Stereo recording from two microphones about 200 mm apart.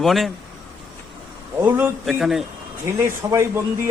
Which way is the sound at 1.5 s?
10° right (ahead or behind).